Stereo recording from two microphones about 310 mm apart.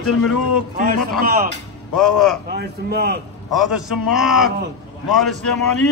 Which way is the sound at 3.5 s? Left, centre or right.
Centre.